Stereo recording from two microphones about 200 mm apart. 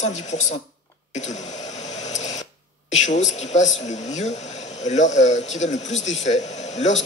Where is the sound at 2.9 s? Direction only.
35° left (ahead or behind).